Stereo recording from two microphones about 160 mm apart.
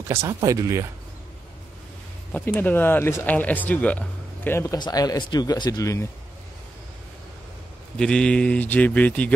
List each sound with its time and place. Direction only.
0.1 s speech: 20° right (ahead or behind)
2.3 s speech: 10° left (ahead or behind)
4.7 s speech: 25° left (ahead or behind)
8.0 s speech: 5° left (ahead or behind)